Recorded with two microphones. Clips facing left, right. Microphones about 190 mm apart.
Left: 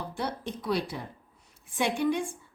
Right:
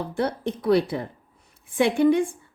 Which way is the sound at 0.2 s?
60° right (ahead or behind).